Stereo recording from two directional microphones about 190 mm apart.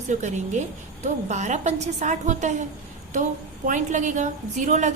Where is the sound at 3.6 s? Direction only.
40° right (ahead or behind).